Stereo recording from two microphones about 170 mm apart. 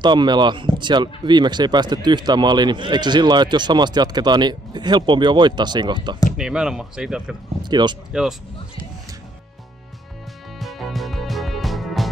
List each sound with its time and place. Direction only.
0.0 s speech: 25° right (ahead or behind)
6.3 s speech: 5° right (ahead or behind)
7.6 s speech: 25° right (ahead or behind)
8.1 s speech: 5° right (ahead or behind)
10.6 s music: centre (ahead or behind)